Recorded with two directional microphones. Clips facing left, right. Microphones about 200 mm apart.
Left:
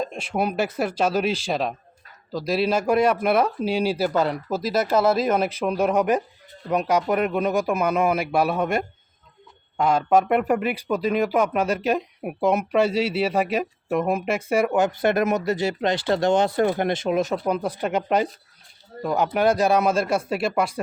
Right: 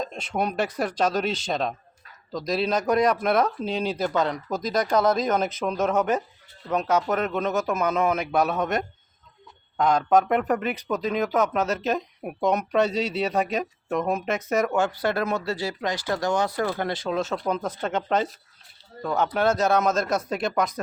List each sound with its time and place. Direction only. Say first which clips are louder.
0.0 s speech: left 2 dB; 10° left (ahead or behind)